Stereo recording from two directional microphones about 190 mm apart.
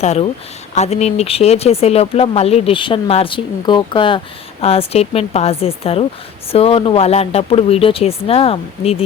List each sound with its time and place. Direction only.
0.0 s speech: 35° left (ahead or behind)